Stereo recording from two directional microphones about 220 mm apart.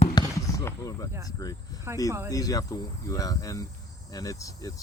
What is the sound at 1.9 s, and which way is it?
Speech, 10° right (ahead or behind).